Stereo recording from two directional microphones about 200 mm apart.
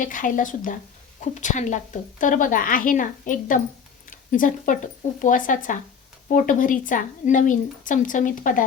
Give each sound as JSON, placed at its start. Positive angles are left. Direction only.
{"t": 0.0, "sound": "a woman's voice", "side_deg": 40}